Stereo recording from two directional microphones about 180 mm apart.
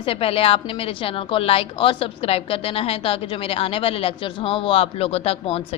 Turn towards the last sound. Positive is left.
turn(degrees=35)  # may be behind; listen again after turning